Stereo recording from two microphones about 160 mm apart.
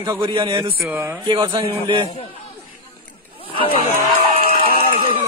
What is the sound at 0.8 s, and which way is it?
Speech, 15° right (ahead or behind).